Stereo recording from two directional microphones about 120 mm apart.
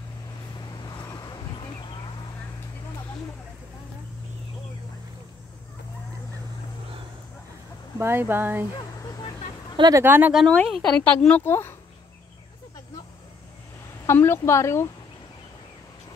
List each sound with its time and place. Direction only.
0.6 s vehicle: 35° left (ahead or behind)
8.0 s speech: 20° right (ahead or behind)
8.7 s a sound: 30° left (ahead or behind)
9.8 s speech: 35° right (ahead or behind)
10.0 s speech: 15° right (ahead or behind)
10.3 s speech: 5° left (ahead or behind)
11.4 s speech: 20° left (ahead or behind)
14.0 s speech: 20° left (ahead or behind)